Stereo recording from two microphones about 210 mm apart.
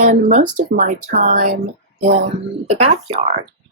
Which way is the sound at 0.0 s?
35° right (ahead or behind).